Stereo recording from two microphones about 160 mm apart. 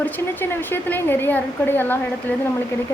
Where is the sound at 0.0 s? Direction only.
10° left (ahead or behind).